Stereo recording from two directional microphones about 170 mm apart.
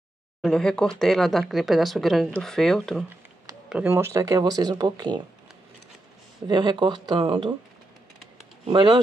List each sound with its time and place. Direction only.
0.4 s speech: 5° left (ahead or behind)
3.6 s speech: 10° right (ahead or behind); by 5.2 s 25° right (ahead or behind)
6.4 s speech: 25° right (ahead or behind)
8.6 s speech: 30° right (ahead or behind)